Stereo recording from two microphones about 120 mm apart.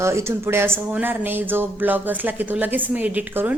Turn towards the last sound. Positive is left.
turn(degrees=-15)  # may be behind; listen again after turning